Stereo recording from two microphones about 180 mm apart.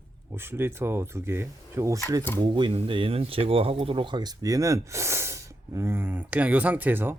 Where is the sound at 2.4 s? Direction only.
25° right (ahead or behind).